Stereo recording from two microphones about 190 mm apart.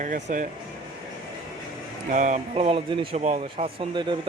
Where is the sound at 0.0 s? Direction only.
45° right (ahead or behind).